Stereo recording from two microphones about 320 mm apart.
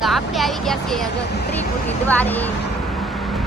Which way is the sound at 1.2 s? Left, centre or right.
Left.